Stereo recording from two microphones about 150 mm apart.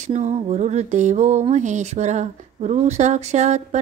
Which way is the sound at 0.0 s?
50° right (ahead or behind).